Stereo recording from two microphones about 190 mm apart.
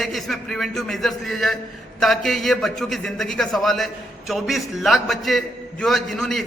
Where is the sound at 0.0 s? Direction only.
Centre (ahead or behind).